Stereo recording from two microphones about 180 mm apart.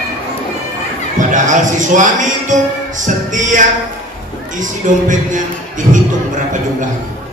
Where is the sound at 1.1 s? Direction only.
45° right (ahead or behind).